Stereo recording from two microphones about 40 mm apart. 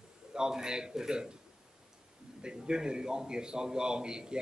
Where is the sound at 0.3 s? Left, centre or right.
Centre.